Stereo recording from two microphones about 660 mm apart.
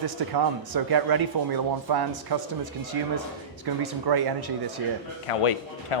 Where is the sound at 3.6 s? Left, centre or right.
Right.